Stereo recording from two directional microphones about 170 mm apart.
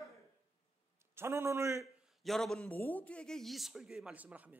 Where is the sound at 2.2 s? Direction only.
Centre (ahead or behind).